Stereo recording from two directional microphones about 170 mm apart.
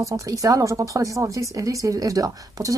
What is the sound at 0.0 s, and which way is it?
Speech, 20° right (ahead or behind).